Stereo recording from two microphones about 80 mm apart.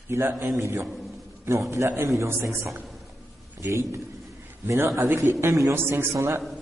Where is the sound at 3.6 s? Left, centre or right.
Right.